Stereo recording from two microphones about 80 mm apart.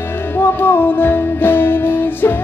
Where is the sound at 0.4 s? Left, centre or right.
Left.